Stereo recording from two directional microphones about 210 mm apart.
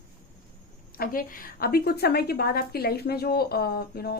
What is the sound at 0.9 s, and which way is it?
A woman's voice, 45° left (ahead or behind).